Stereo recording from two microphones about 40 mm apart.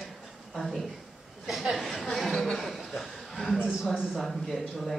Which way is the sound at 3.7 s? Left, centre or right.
Centre.